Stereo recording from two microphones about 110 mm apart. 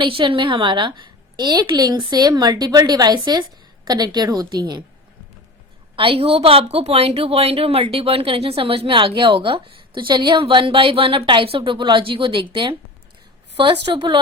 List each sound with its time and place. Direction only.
0.0 s a woman's voice: 50° right (ahead or behind)
6.0 s a woman's voice: 60° right (ahead or behind)